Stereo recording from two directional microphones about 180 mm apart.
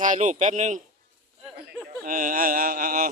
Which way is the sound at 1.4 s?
Centre (ahead or behind).